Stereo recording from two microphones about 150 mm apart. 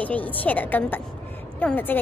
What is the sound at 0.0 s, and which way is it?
A woman's voice, 10° left (ahead or behind).